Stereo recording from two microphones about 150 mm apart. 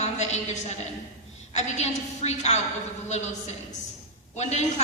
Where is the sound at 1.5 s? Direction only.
45° left (ahead or behind).